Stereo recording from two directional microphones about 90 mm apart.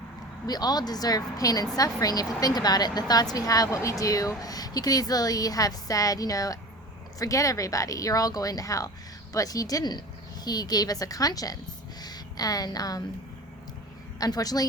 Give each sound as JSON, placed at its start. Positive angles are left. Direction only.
{"t": 0.4, "sound": "a woman's voice", "side_deg": 50}
{"t": 14.2, "sound": "a woman's voice", "side_deg": 45}